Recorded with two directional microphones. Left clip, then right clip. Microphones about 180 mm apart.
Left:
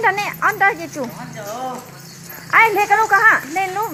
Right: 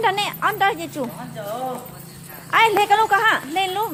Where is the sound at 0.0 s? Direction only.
15° right (ahead or behind).